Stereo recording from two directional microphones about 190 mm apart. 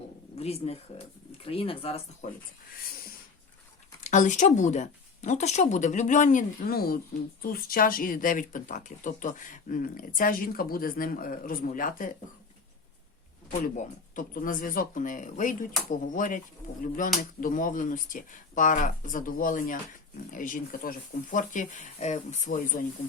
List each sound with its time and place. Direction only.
0.3 s speech: 30° left (ahead or behind)
4.0 s speech: 40° left (ahead or behind)
13.7 s speech: 45° left (ahead or behind)